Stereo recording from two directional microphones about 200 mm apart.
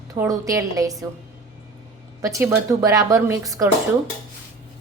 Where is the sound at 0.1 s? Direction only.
15° right (ahead or behind).